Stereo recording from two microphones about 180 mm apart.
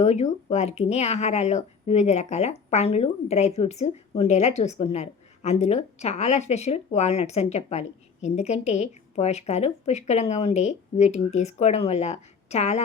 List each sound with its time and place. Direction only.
0.0 s speech: 40° left (ahead or behind)